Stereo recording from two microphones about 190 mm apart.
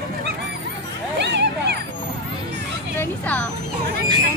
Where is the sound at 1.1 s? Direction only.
60° right (ahead or behind).